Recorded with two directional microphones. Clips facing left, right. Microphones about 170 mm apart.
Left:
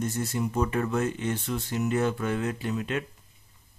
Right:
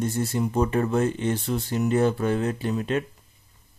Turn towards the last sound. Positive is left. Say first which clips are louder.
# right 4 dB
turn(degrees=-35)  # may be behind; listen again after turning